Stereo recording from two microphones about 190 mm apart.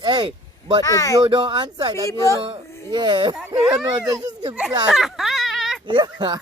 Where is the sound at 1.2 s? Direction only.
25° right (ahead or behind).